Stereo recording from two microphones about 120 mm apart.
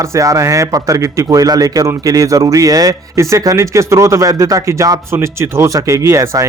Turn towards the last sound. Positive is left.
turn(degrees=-25)  # may be behind; listen again after turning